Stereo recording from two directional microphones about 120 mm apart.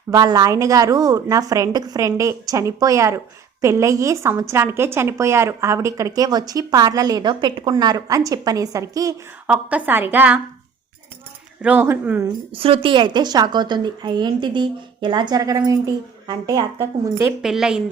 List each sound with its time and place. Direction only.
0.1 s a woman's voice: 35° right (ahead or behind)
9.5 s a woman's voice: 15° right (ahead or behind)
11.6 s a woman's voice: 15° right (ahead or behind)
12.5 s a woman's voice: 50° right (ahead or behind)
16.7 s a woman's voice: 20° right (ahead or behind)
17.4 s a woman's voice: 5° right (ahead or behind)